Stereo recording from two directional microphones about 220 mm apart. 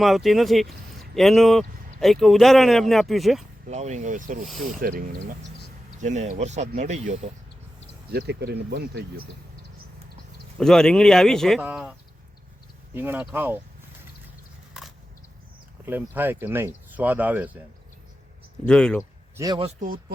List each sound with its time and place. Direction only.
0.0 s speech: centre (ahead or behind)
3.7 s speech: 30° right (ahead or behind)
8.1 s speech: 50° right (ahead or behind)
10.6 s speech: centre (ahead or behind)
14.7 s a sound: centre (ahead or behind)
15.9 s speech: 10° right (ahead or behind)
18.6 s speech: 5° left (ahead or behind)
19.4 s speech: 15° right (ahead or behind)
19.6 s speech: 40° right (ahead or behind)